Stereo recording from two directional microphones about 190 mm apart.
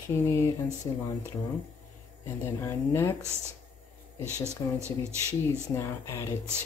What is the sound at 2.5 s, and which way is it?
Speech, 15° left (ahead or behind).